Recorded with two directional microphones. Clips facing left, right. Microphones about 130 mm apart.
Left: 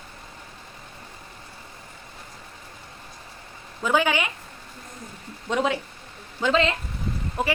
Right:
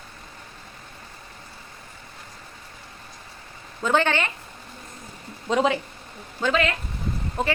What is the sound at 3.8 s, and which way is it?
Speech, 10° left (ahead or behind).